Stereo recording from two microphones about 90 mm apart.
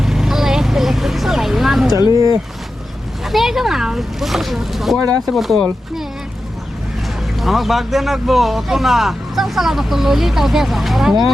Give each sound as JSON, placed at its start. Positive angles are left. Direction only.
{"t": 0.0, "sound": "vehicle", "side_deg": -5}
{"t": 2.0, "sound": "a sound", "side_deg": -40}
{"t": 3.2, "sound": "a man's voice", "side_deg": -5}
{"t": 4.9, "sound": "speech", "side_deg": -45}
{"t": 5.3, "sound": "a man's voice", "side_deg": 0}
{"t": 7.3, "sound": "a man's voice", "side_deg": 0}